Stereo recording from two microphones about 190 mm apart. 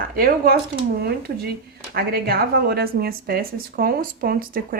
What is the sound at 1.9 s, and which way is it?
Speech, 55° right (ahead or behind).